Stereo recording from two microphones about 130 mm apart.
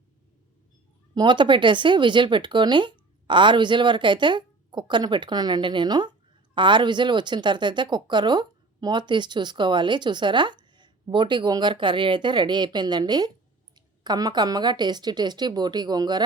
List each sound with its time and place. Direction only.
1.1 s speech: 35° right (ahead or behind)